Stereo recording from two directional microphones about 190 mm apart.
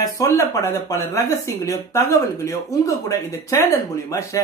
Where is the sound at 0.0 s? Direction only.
20° left (ahead or behind).